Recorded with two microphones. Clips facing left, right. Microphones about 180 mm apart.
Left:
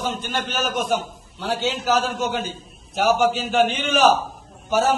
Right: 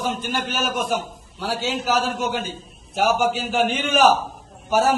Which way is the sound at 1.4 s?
Centre (ahead or behind).